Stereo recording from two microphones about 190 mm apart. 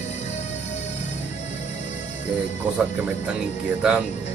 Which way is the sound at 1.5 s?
35° left (ahead or behind).